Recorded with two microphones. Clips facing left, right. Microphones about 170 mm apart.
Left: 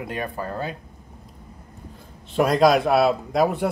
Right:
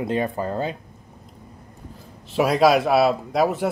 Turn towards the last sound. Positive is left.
turn(degrees=0)  # may be behind; listen again after turning